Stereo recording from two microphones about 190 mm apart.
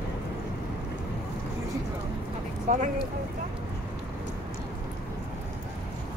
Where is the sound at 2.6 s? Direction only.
40° right (ahead or behind).